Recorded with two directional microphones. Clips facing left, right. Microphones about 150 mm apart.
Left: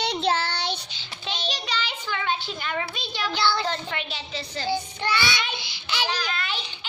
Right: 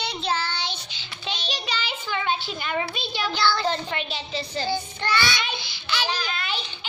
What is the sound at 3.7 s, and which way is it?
Speech, 30° right (ahead or behind).